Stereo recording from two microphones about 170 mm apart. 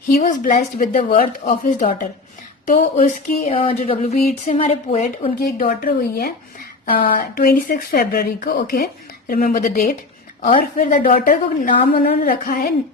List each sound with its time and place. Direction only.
0.2 s a woman's voice: 45° left (ahead or behind)
2.6 s a sound: 50° left (ahead or behind)
5.4 s speech: 60° left (ahead or behind)